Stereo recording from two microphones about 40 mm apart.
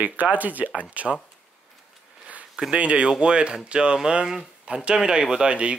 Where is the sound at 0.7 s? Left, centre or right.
Right.